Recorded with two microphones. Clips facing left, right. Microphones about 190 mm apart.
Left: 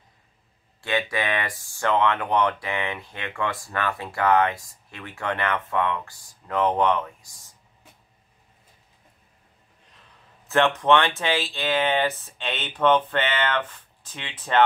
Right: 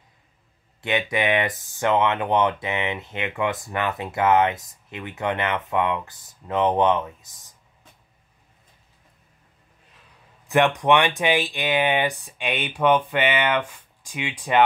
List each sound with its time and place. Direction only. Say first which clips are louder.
0.7 s speech: right 2 dB; 20° right (ahead or behind)
10.5 s speech: right 1 dB; 15° right (ahead or behind)